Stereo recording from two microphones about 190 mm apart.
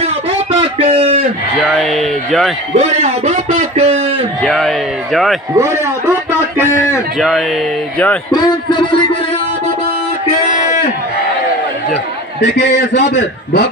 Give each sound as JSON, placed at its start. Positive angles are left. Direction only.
{"t": 0.0, "sound": "a sound", "side_deg": -30}
{"t": 1.6, "sound": "a man's voice", "side_deg": 0}
{"t": 2.7, "sound": "speech", "side_deg": -35}
{"t": 4.4, "sound": "a man's voice", "side_deg": 0}
{"t": 5.6, "sound": "a man's voice", "side_deg": -15}
{"t": 6.6, "sound": "a man's voice", "side_deg": 15}
{"t": 7.2, "sound": "a man's voice", "side_deg": 0}
{"t": 8.3, "sound": "speech", "side_deg": 20}
{"t": 12.4, "sound": "a man's voice", "side_deg": 65}